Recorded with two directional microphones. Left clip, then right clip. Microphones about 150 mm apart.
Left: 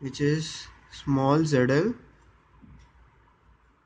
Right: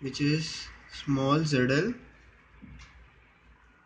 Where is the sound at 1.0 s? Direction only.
60° left (ahead or behind).